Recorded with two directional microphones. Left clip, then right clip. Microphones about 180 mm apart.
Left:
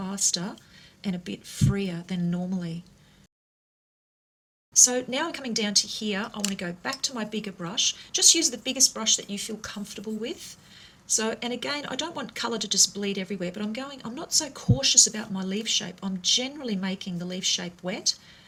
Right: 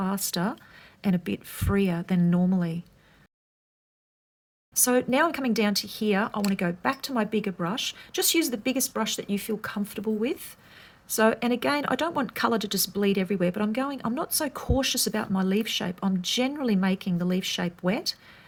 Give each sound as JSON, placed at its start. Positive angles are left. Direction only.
{"t": 0.0, "sound": "speech", "side_deg": -50}
{"t": 4.8, "sound": "speech", "side_deg": -45}